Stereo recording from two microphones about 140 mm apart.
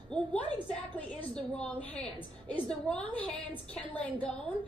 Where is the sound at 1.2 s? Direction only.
10° left (ahead or behind).